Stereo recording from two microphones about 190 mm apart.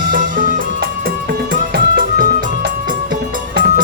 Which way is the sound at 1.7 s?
45° right (ahead or behind).